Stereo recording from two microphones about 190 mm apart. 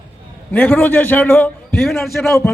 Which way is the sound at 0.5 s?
10° left (ahead or behind).